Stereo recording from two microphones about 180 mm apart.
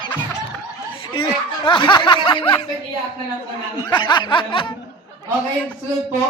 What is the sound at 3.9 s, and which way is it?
Speech, 25° left (ahead or behind).